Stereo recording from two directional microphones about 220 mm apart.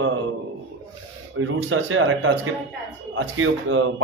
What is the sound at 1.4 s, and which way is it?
A man's voice, 65° right (ahead or behind).